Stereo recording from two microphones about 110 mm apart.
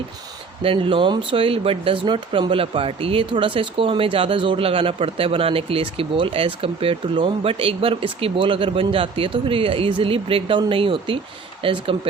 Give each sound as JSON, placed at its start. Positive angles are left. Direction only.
{"t": 0.6, "sound": "speech", "side_deg": -55}